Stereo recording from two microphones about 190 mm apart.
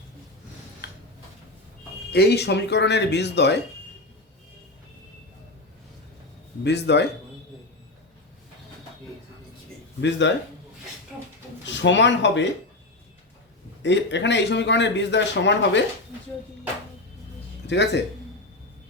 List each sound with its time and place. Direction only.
0.8 s tick-tock: 55° left (ahead or behind)
2.1 s speech: 60° left (ahead or behind)
6.7 s speech: 65° left (ahead or behind)
10.0 s speech: 70° left (ahead or behind)
11.6 s speech: 70° left (ahead or behind)
13.8 s speech: 70° left (ahead or behind)
17.7 s speech: 65° left (ahead or behind)